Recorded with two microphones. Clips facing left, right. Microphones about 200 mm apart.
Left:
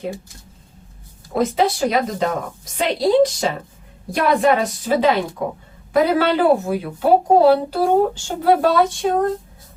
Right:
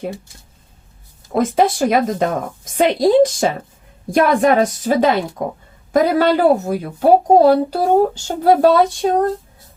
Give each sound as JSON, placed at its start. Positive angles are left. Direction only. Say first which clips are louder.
{"t": 1.4, "sound": "a woman's voice", "louder": "right 3 dB", "side_deg": -50}